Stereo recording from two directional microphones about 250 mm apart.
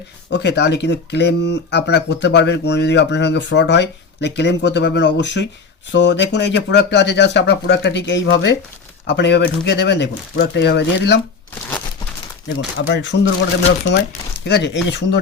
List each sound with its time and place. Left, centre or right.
0.3 s speech: left
12.5 s speech: left
14.4 s speech: left